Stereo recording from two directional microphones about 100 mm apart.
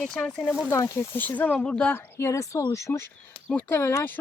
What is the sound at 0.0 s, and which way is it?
Speech, 5° left (ahead or behind).